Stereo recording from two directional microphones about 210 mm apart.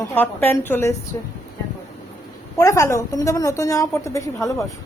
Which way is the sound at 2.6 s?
15° left (ahead or behind).